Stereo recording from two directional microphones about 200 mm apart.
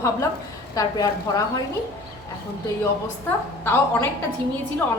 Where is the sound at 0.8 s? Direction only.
15° left (ahead or behind).